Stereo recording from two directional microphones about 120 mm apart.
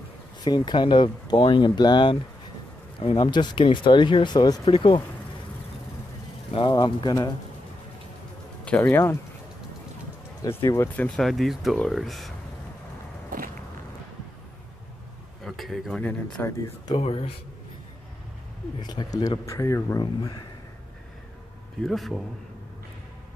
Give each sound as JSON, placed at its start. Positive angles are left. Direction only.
{"t": 0.4, "sound": "speech", "side_deg": 35}
{"t": 3.2, "sound": "speech", "side_deg": 35}
{"t": 6.5, "sound": "speech", "side_deg": 45}
{"t": 8.6, "sound": "speech", "side_deg": 15}
{"t": 10.5, "sound": "speech", "side_deg": 25}
{"t": 11.0, "sound": "speech", "side_deg": 5}
{"t": 15.4, "sound": "speech", "side_deg": 0}
{"t": 16.0, "sound": "speech", "side_deg": 15}
{"t": 18.8, "sound": "speech", "side_deg": 35}
{"t": 21.8, "sound": "speech", "side_deg": 0}